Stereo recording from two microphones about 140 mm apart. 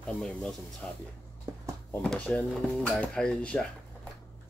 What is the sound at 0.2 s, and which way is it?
Speech, 5° left (ahead or behind).